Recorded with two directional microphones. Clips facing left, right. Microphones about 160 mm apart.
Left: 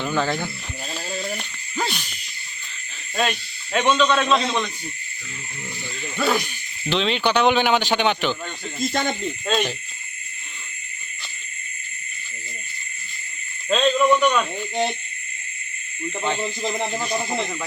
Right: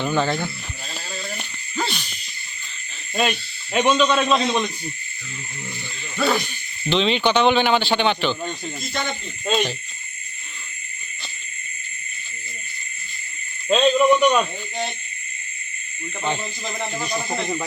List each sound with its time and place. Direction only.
0.0 s speech: centre (ahead or behind)
1.7 s a sound: 10° left (ahead or behind)
3.2 s speech: 15° right (ahead or behind)
6.1 s speech: 5° left (ahead or behind)
8.9 s speech: 45° left (ahead or behind)
9.5 s speech: centre (ahead or behind)
13.7 s speech: 15° right (ahead or behind)
16.4 s speech: 25° left (ahead or behind)